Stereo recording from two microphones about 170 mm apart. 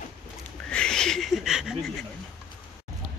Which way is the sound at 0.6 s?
5° left (ahead or behind).